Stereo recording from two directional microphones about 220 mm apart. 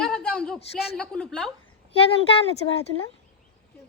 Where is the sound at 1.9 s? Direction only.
25° left (ahead or behind).